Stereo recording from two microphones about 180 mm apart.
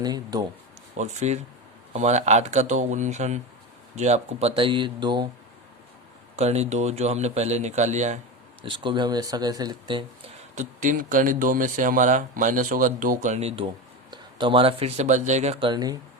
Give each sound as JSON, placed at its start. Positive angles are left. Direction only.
{"t": 0.0, "sound": "speech", "side_deg": -20}
{"t": 0.9, "sound": "a man's voice", "side_deg": -40}
{"t": 6.3, "sound": "a man's voice", "side_deg": -35}
{"t": 8.6, "sound": "speech", "side_deg": -25}
{"t": 10.5, "sound": "speech", "side_deg": -45}
{"t": 13.7, "sound": "speech", "side_deg": -25}
{"t": 15.7, "sound": "speech", "side_deg": -20}